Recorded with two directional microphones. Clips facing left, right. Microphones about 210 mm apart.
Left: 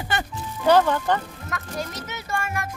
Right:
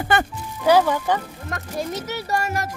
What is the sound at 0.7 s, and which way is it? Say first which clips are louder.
Speech: right 1 dB; 10° right (ahead or behind).